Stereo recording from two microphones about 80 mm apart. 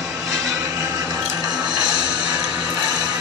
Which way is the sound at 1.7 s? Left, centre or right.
Centre.